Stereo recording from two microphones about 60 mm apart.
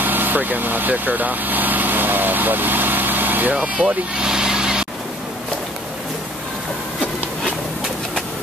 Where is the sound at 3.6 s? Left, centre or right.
Centre.